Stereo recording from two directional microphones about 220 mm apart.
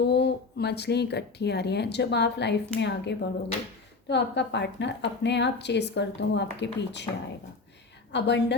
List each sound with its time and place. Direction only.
0.0 s speech: 50° left (ahead or behind)
8.1 s speech: 50° left (ahead or behind)